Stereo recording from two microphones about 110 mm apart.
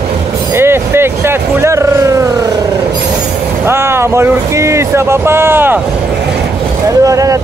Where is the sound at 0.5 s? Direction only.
20° right (ahead or behind).